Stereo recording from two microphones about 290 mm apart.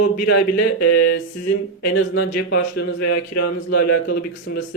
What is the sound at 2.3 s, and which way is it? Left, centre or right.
Speech, left.